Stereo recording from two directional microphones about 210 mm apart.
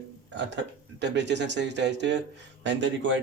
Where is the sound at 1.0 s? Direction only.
55° right (ahead or behind).